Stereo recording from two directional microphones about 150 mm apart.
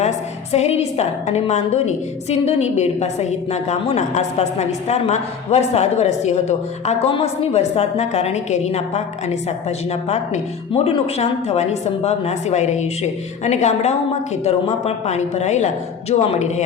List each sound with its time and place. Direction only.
0.5 s a woman's voice: 45° left (ahead or behind)